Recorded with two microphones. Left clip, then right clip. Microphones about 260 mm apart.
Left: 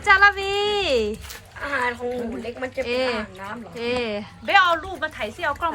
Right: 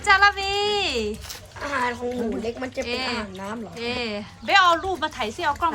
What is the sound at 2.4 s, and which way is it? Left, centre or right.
Speech, right.